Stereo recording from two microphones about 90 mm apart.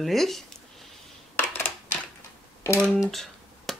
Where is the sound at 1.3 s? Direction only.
20° left (ahead or behind).